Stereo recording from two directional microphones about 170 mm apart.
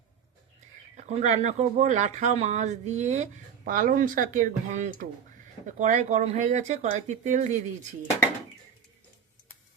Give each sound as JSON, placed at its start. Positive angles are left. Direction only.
{"t": 0.9, "sound": "speech", "side_deg": -45}